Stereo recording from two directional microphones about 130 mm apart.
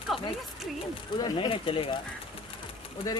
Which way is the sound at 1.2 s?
35° left (ahead or behind).